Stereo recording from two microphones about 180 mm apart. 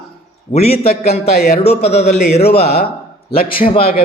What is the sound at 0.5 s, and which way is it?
Speech, 35° left (ahead or behind).